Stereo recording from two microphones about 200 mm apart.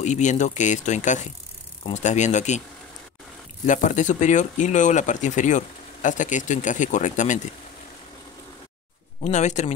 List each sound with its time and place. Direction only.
0.0 s speech: 35° left (ahead or behind)
3.6 s speech: 40° left (ahead or behind)
9.2 s speech: 35° left (ahead or behind)